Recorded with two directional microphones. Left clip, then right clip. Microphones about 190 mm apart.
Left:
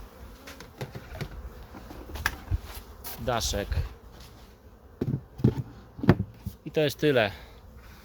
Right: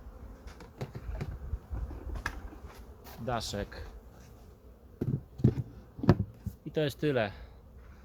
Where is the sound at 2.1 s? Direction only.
35° left (ahead or behind).